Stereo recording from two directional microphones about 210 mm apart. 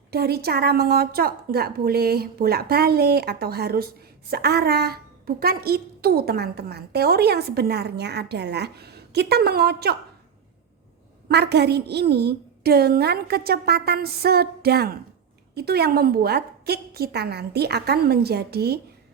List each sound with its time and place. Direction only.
0.1 s a woman's voice: 50° right (ahead or behind)
11.3 s a woman's voice: 50° right (ahead or behind)